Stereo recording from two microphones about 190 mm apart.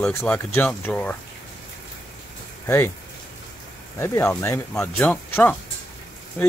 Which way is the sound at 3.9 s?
15° left (ahead or behind).